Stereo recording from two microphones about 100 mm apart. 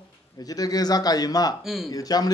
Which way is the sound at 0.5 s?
40° left (ahead or behind).